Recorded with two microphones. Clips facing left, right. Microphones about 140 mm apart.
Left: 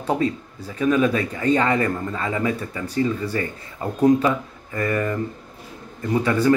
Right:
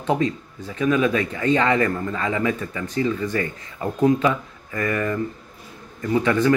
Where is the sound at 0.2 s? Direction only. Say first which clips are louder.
Even; 35° left (ahead or behind).